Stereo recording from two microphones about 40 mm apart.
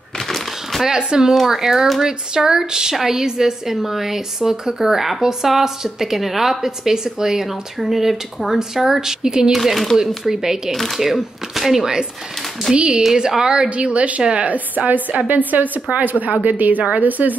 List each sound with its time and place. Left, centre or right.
0.8 s a woman's voice: centre
9.5 s speech: centre
10.3 s a woman's voice: centre
10.7 s speech: centre
12.7 s a woman's voice: right
13.1 s a woman's voice: centre
13.7 s a woman's voice: right